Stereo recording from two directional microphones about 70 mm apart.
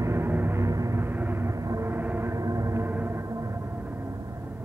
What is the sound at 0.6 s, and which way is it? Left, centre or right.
Music, right.